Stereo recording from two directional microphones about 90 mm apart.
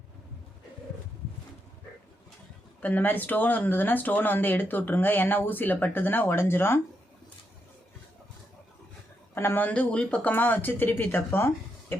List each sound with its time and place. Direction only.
2.8 s speech: 20° left (ahead or behind)
9.3 s speech: 25° left (ahead or behind)
9.6 s speech: 10° left (ahead or behind)